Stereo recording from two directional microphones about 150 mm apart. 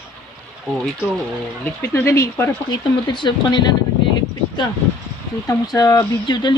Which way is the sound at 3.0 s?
30° left (ahead or behind).